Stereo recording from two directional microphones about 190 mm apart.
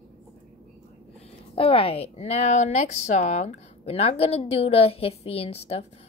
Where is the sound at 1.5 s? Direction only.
30° left (ahead or behind).